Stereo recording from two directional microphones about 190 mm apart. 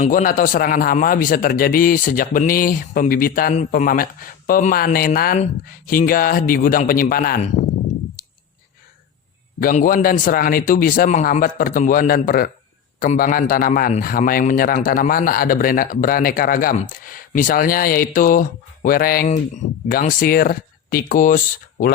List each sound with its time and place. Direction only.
0.0 s a man's voice: 45° left (ahead or behind)
9.6 s a man's voice: 45° left (ahead or behind)